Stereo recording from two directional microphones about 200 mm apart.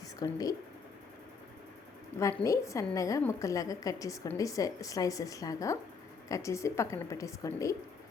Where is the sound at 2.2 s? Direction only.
15° left (ahead or behind).